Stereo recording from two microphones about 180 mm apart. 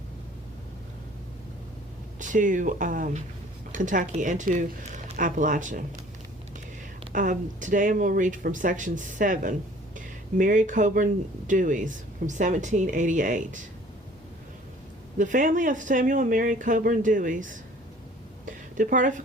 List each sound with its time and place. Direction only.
2.1 s speech: 45° right (ahead or behind)
7.1 s speech: 45° right (ahead or behind)
15.2 s speech: 45° right (ahead or behind)
18.4 s a sound: 45° right (ahead or behind)